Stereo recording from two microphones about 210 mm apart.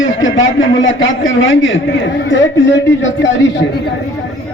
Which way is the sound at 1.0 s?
65° left (ahead or behind).